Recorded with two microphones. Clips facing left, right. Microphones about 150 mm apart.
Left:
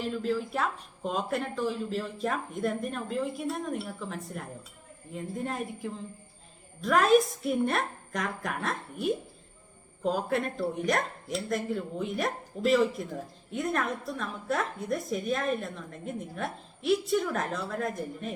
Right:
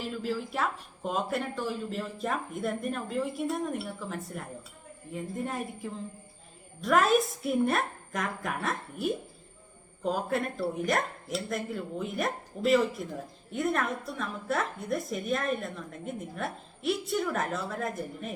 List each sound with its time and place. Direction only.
0.0 s a woman's voice: centre (ahead or behind)